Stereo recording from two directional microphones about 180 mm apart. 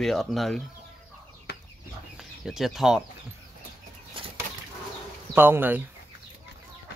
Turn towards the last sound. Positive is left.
turn(degrees=-10)  # may be behind; listen again after turning